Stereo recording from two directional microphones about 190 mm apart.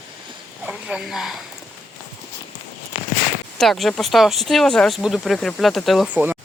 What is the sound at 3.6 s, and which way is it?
Speech, centre (ahead or behind).